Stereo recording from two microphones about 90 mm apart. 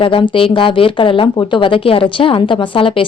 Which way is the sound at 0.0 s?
80° left.